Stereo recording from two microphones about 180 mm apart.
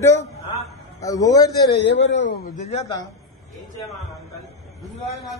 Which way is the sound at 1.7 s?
80° left.